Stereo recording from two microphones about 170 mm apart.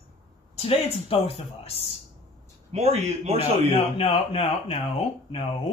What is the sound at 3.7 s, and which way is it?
Speech, 35° left (ahead or behind).